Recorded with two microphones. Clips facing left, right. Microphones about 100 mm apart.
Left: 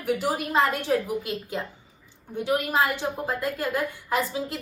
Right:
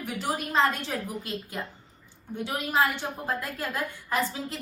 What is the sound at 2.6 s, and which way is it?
A woman's voice, 15° left (ahead or behind).